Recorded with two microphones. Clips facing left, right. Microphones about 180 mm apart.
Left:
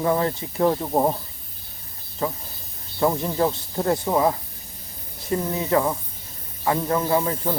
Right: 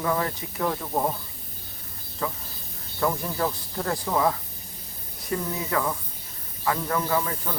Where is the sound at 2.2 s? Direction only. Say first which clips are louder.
Left 4 dB; 25° left (ahead or behind).